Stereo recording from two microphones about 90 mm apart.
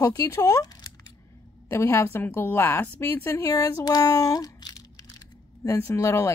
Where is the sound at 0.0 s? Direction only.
35° left (ahead or behind).